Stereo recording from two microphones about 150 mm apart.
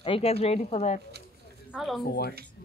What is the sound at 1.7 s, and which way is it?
Speech, centre (ahead or behind).